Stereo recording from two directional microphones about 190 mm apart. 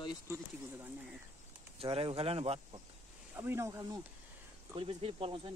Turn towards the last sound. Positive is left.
turn(degrees=-30)  # may be behind; listen again after turning